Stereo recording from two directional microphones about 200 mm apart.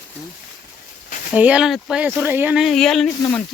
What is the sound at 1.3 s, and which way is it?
Speech, 5° right (ahead or behind).